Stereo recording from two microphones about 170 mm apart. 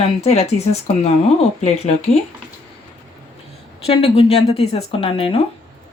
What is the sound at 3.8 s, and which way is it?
Speech, 35° left (ahead or behind).